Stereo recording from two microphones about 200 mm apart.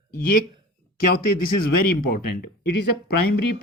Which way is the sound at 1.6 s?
45° left (ahead or behind).